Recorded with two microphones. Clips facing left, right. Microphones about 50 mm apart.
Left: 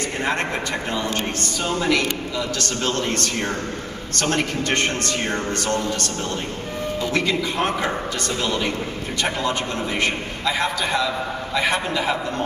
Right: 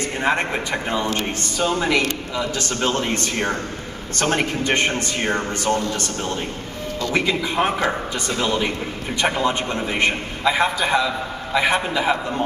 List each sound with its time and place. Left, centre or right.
0.2 s a man's voice: centre
1.6 s speech: centre
1.9 s a man's voice: centre
7.2 s a man's voice: centre